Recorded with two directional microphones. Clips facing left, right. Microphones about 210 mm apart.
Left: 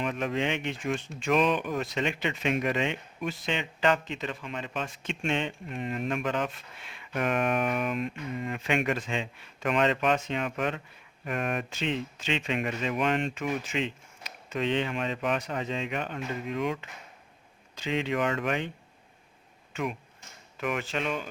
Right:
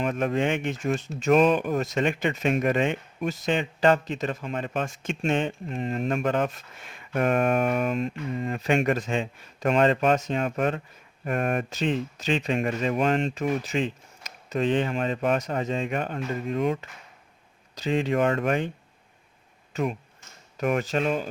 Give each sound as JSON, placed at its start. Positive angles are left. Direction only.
{"t": 0.0, "sound": "speech", "side_deg": -45}
{"t": 5.7, "sound": "speech", "side_deg": -30}
{"t": 19.7, "sound": "speech", "side_deg": -35}